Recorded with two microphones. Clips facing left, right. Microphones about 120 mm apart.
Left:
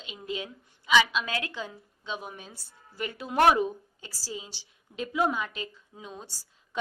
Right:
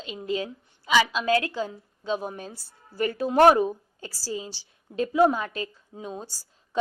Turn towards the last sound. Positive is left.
turn(degrees=-35)  # may be behind; listen again after turning